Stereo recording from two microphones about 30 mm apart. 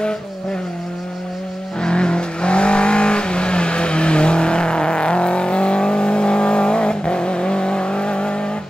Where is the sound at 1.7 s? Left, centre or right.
Left.